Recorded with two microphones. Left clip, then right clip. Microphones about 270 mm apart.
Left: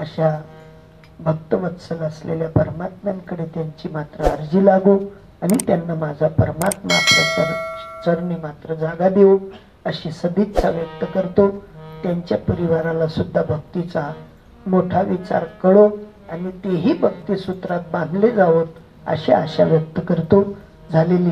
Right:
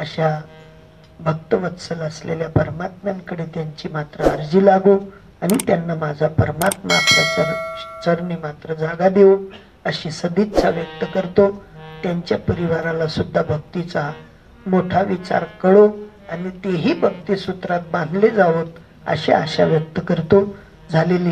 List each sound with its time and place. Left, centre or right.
0.0 s speech: right
6.9 s speech: centre
8.0 s speech: right